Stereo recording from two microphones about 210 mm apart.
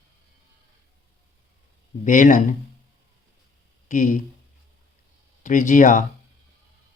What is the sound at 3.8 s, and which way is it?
Speech, 35° left (ahead or behind).